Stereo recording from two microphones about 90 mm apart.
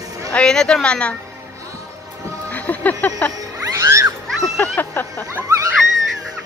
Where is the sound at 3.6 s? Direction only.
35° right (ahead or behind).